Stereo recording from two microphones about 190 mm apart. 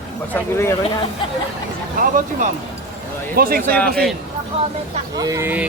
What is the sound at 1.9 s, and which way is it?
Speech, 45° right (ahead or behind).